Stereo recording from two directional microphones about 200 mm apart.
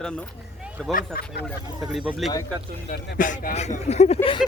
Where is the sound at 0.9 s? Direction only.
50° left (ahead or behind).